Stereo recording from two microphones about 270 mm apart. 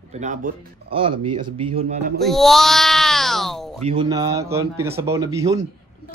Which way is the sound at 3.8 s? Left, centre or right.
Right.